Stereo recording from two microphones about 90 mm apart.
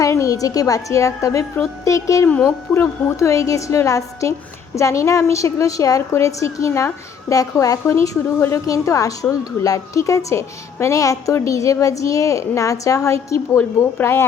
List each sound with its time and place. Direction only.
0.0 s a woman's voice: 35° left (ahead or behind)
2.2 s a woman's voice: 15° left (ahead or behind)
2.7 s a woman's voice: 30° left (ahead or behind)
13.7 s speech: 25° left (ahead or behind)